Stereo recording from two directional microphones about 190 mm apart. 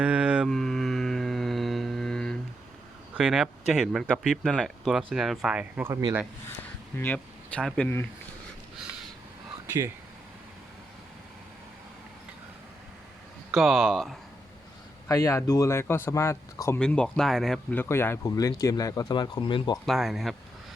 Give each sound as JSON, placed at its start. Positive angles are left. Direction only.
{"t": 0.0, "sound": "mantra", "side_deg": -5}
{"t": 3.2, "sound": "speech", "side_deg": -5}
{"t": 5.9, "sound": "speech", "side_deg": -25}
{"t": 6.9, "sound": "speech", "side_deg": 10}
{"t": 13.5, "sound": "speech", "side_deg": 0}
{"t": 15.0, "sound": "speech", "side_deg": 15}
{"t": 19.8, "sound": "speech", "side_deg": 0}